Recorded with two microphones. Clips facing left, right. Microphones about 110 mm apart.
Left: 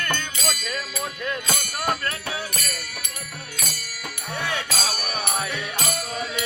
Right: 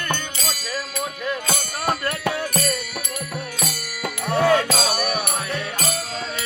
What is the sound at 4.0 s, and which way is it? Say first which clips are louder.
Music: right 10 dB; 90° right.